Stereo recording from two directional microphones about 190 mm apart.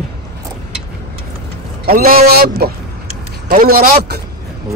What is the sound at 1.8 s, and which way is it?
A man's voice, 50° right (ahead or behind).